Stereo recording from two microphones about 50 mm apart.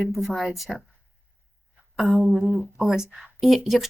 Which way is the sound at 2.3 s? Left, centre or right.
Centre.